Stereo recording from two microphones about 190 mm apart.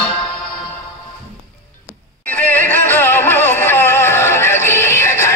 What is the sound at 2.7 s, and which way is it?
Music, 10° left (ahead or behind).